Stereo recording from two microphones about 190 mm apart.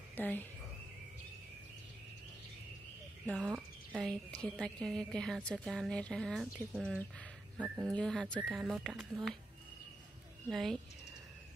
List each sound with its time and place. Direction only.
0.1 s speech: 10° left (ahead or behind)
3.4 s speech: 5° right (ahead or behind)
7.5 s speech: 5° right (ahead or behind)
7.8 s speech: 5° left (ahead or behind)
10.5 s speech: centre (ahead or behind)